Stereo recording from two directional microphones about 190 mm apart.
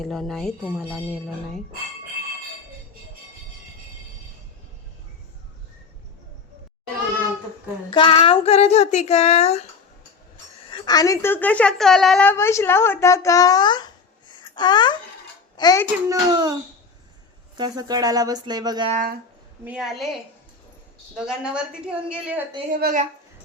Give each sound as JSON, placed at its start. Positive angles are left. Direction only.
{"t": 0.0, "sound": "speech", "side_deg": 0}
{"t": 7.9, "sound": "a woman's voice", "side_deg": 25}
{"t": 16.0, "sound": "speech", "side_deg": -20}
{"t": 17.6, "sound": "speech", "side_deg": -20}
{"t": 18.9, "sound": "speech", "side_deg": -45}
{"t": 19.6, "sound": "speech", "side_deg": 0}
{"t": 21.2, "sound": "a woman's voice", "side_deg": -5}
{"t": 22.7, "sound": "speech", "side_deg": -45}